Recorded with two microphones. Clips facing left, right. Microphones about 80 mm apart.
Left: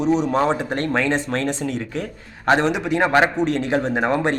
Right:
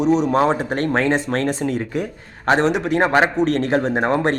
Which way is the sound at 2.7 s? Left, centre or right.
Centre.